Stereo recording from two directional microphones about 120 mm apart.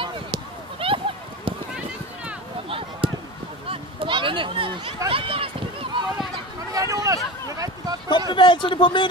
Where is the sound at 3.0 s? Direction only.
50° right (ahead or behind).